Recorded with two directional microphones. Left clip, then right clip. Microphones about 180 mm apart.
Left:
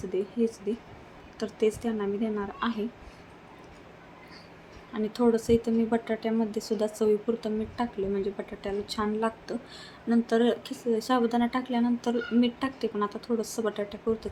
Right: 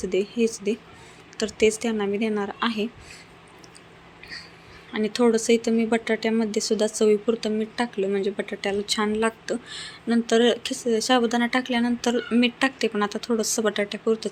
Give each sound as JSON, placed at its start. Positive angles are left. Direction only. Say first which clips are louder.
{"t": 0.0, "sound": "speech", "louder": "right 5 dB", "side_deg": -10}
{"t": 4.9, "sound": "speech", "louder": "right 5 dB", "side_deg": -10}